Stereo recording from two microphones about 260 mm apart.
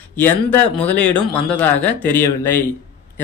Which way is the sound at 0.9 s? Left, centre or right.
Centre.